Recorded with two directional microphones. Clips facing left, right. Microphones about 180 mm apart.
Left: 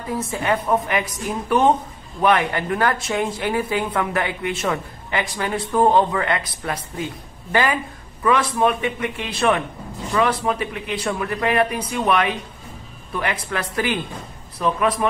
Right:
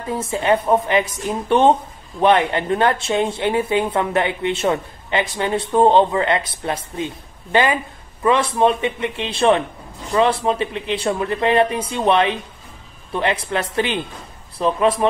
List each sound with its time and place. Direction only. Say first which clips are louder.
0.0 s speech: right 3 dB; 25° right (ahead or behind)